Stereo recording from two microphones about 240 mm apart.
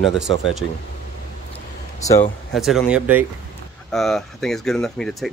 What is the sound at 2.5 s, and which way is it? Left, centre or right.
Speech, centre.